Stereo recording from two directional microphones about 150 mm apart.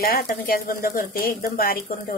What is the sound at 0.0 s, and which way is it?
Speech, 80° left.